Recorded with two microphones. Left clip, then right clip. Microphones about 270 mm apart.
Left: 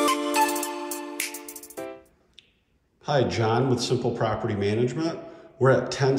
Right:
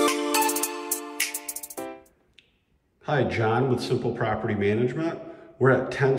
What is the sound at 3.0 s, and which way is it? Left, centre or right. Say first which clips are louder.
A man's voice: left 1 dB; centre.